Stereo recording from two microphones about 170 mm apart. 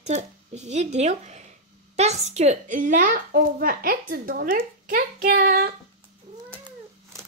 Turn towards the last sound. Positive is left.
turn(degrees=-65)  # may be behind; listen again after turning